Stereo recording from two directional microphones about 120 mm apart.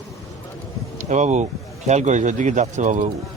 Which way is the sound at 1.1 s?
85° right.